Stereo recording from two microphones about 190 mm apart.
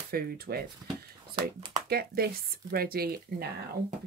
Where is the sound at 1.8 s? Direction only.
55° right (ahead or behind).